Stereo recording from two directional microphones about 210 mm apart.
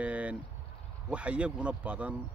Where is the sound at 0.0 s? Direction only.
5° right (ahead or behind).